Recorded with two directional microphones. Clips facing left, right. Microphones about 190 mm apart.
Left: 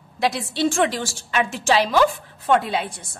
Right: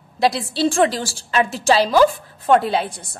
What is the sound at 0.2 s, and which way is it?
A woman's voice, 35° right (ahead or behind).